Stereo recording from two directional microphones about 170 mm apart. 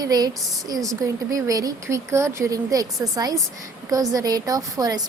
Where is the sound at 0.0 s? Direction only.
20° right (ahead or behind).